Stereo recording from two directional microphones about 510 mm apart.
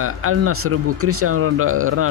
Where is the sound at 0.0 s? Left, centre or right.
Right.